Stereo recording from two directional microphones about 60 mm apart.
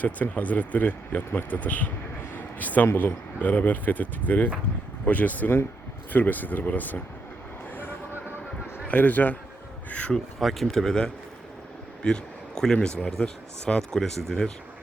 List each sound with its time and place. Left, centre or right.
0.0 s speech: left
2.3 s a sound: left
3.0 s speech: left
8.9 s speech: left
10.4 s speech: centre